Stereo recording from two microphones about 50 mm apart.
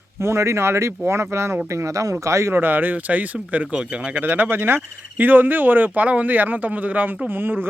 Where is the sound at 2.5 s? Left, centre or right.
Right.